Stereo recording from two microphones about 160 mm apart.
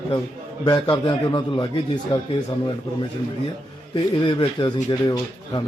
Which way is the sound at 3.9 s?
30° left (ahead or behind).